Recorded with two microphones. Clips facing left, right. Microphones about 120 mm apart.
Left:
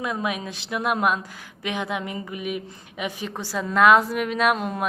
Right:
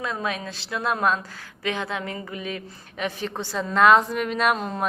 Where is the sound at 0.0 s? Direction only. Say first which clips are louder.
Left 1 dB; 15° left (ahead or behind).